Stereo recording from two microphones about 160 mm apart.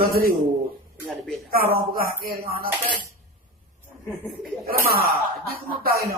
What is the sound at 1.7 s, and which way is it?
Speech, 65° right (ahead or behind).